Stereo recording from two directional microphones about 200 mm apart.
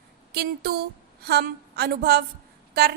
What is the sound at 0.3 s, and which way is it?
A woman's voice, 50° right (ahead or behind).